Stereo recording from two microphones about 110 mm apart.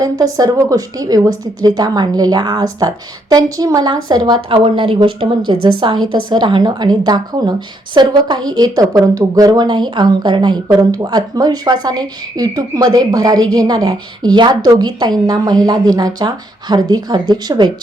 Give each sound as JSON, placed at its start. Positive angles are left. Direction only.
{"t": 0.0, "sound": "speech", "side_deg": -35}